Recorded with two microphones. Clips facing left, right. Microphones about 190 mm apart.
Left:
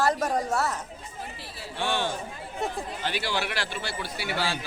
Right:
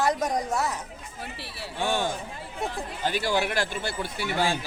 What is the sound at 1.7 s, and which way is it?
Speech, 45° right (ahead or behind).